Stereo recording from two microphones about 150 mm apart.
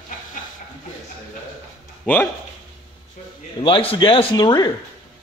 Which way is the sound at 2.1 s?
10° left (ahead or behind).